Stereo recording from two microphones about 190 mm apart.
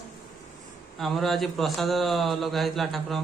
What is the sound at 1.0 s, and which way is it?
A man's voice, centre (ahead or behind).